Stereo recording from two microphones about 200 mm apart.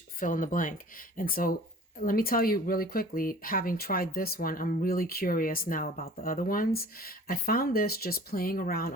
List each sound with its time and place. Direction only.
0.2 s speech: 40° left (ahead or behind)